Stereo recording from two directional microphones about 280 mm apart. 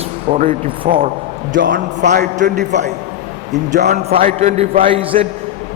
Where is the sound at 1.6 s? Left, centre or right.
Right.